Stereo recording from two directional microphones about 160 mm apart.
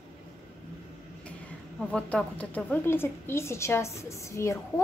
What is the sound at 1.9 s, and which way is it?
A woman's voice, 5° left (ahead or behind).